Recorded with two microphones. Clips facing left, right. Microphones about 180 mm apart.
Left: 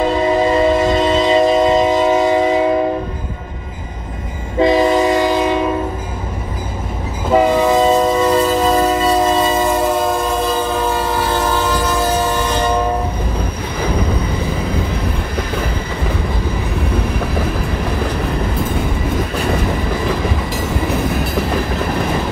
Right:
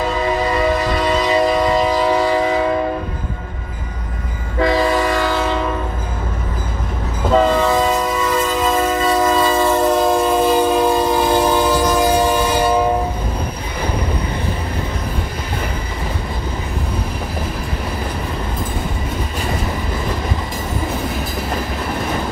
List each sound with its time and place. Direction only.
0.5 s train: 25° left (ahead or behind)
4.6 s train: 20° left (ahead or behind)
7.3 s train: 15° left (ahead or behind)
10.5 s train: 15° right (ahead or behind)